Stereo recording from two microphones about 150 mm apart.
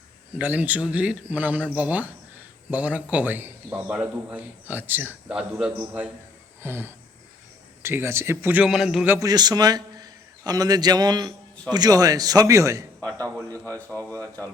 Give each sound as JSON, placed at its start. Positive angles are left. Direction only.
{"t": 0.3, "sound": "a man's voice", "side_deg": -10}
{"t": 9.1, "sound": "a man's voice", "side_deg": -25}
{"t": 13.0, "sound": "a man's voice", "side_deg": 10}